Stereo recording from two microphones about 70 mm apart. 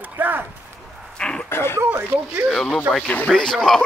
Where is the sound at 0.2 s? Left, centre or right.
Right.